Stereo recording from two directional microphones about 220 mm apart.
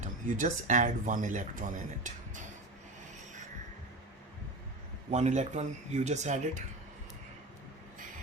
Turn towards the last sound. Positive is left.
turn(degrees=-30)  # may be behind; listen again after turning